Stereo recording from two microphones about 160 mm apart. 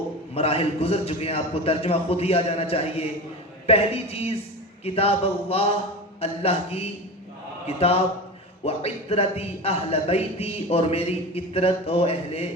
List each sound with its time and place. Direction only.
0.3 s a man's voice: 35° left (ahead or behind)